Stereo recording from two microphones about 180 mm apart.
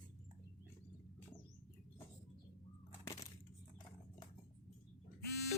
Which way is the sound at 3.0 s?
20° left (ahead or behind).